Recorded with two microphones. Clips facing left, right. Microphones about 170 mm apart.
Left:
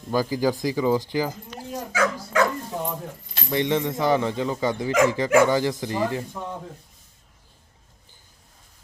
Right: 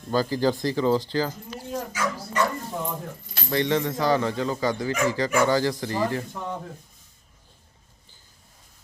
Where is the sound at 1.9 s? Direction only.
80° left.